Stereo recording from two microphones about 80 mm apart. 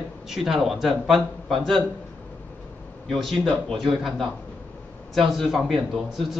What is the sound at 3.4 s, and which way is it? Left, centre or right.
Speech, right.